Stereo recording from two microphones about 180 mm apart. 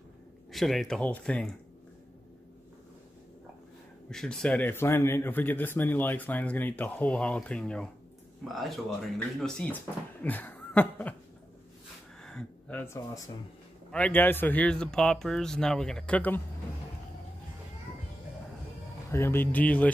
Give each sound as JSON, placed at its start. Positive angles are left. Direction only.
{"t": 0.5, "sound": "speech", "side_deg": 0}
{"t": 4.1, "sound": "a man's voice", "side_deg": 5}
{"t": 10.2, "sound": "a sound", "side_deg": 10}
{"t": 12.2, "sound": "a sound", "side_deg": 5}
{"t": 13.9, "sound": "speech", "side_deg": 10}
{"t": 19.0, "sound": "a man's voice", "side_deg": 15}